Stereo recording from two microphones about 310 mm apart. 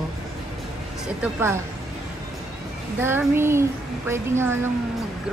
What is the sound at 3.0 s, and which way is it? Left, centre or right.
A woman's voice, centre.